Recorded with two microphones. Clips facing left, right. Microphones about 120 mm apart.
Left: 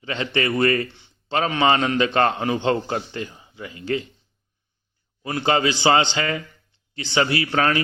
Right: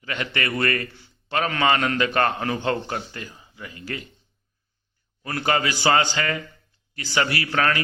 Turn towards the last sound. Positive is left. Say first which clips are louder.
# left 3 dB
turn(degrees=25)  # may be behind; listen again after turning